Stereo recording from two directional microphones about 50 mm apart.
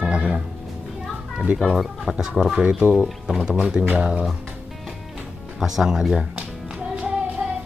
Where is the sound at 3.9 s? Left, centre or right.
Right.